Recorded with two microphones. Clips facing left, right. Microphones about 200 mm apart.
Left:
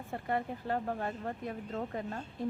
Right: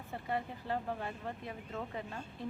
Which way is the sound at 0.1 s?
50° left (ahead or behind).